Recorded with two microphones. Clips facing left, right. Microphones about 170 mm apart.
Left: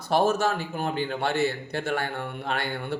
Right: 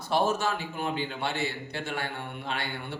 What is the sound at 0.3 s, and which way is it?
A man's voice, 40° left (ahead or behind).